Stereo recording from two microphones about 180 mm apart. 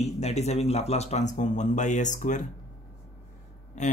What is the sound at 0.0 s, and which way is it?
A man's voice, 35° left (ahead or behind).